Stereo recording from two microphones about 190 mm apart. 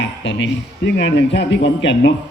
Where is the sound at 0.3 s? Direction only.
70° left (ahead or behind).